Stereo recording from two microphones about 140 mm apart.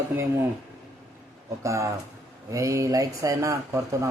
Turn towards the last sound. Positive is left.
turn(degrees=-20)  # may be behind; listen again after turning